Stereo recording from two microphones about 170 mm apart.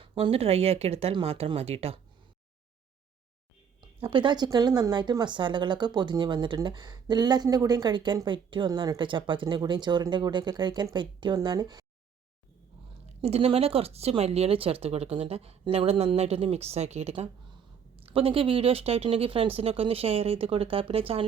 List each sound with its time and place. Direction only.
0.0 s speech: 30° right (ahead or behind)
4.0 s speech: 30° right (ahead or behind)
13.2 s speech: 35° right (ahead or behind)